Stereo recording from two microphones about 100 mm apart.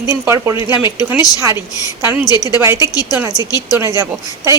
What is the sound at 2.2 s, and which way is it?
Speech, 40° left (ahead or behind).